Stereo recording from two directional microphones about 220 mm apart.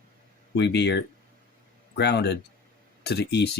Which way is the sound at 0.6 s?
50° left (ahead or behind).